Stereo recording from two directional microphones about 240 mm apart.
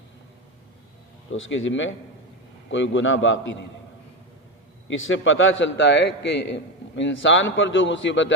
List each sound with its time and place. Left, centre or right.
1.3 s a man's voice: left
4.9 s a man's voice: left